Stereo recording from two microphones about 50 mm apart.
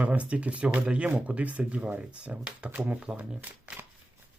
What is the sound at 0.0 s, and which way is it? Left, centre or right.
Speech, right.